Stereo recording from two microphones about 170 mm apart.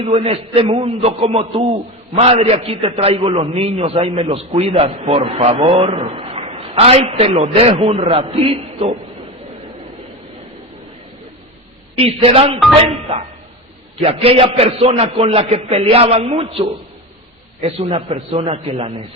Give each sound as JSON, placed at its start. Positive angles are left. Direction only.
{"t": 0.0, "sound": "a man's voice", "side_deg": -35}
{"t": 11.9, "sound": "a man's voice", "side_deg": -35}
{"t": 14.0, "sound": "a man's voice", "side_deg": -35}